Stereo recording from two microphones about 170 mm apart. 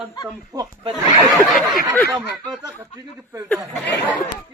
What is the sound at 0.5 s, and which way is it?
Speech, 20° right (ahead or behind).